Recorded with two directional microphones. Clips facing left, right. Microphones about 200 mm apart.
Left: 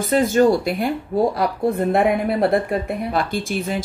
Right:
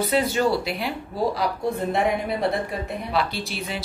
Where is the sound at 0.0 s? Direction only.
50° left (ahead or behind).